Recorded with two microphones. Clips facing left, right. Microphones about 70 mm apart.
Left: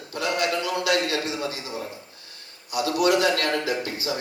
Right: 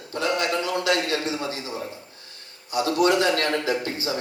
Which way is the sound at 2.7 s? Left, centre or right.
Right.